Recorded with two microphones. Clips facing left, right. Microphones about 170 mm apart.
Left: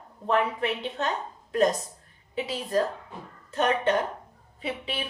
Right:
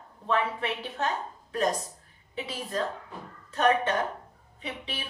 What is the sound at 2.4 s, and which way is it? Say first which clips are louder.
Speech: left 5 dB; 20° left (ahead or behind).